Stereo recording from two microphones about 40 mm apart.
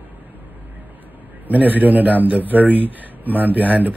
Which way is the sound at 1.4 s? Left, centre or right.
Right.